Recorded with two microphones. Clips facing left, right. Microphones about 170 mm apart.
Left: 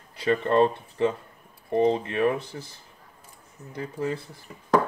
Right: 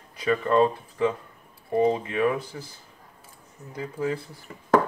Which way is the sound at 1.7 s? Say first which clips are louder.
Even; 10° right (ahead or behind).